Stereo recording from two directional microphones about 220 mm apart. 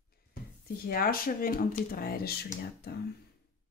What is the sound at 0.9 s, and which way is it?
Speech, 40° left (ahead or behind).